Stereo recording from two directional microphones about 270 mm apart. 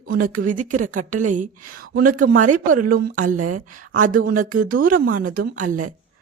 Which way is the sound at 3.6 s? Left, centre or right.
Right.